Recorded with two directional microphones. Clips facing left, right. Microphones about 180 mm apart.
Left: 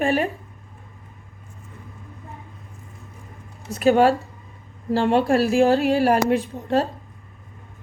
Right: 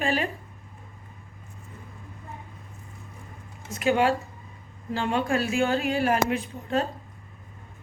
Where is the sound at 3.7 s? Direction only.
35° left (ahead or behind).